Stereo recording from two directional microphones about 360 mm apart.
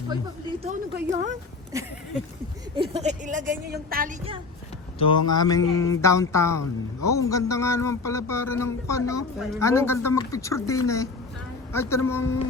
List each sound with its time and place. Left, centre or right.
0.6 s a woman's voice: centre
1.7 s a woman's voice: centre
4.9 s speech: centre